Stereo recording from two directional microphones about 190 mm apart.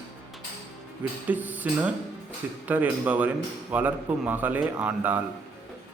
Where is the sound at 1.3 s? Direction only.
10° right (ahead or behind).